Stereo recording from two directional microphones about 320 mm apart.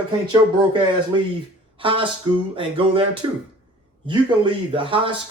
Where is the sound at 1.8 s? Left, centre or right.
Centre.